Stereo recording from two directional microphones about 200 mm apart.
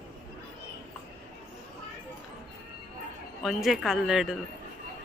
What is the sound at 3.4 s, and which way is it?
Speech, centre (ahead or behind).